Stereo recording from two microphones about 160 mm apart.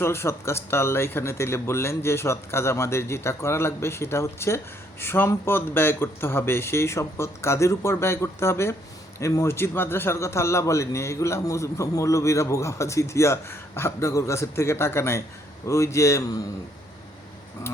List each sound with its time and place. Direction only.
0.0 s a man's voice: 15° left (ahead or behind)